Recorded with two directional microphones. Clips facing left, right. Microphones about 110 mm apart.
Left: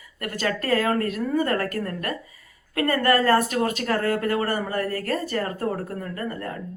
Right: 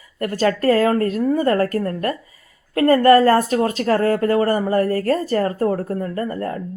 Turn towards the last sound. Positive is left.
turn(degrees=-35)  # may be behind; listen again after turning